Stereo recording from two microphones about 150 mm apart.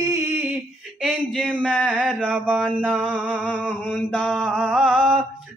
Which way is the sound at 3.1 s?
10° right (ahead or behind).